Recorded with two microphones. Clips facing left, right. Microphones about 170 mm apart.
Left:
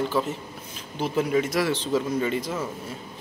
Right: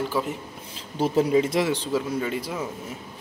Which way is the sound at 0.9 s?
40° right (ahead or behind).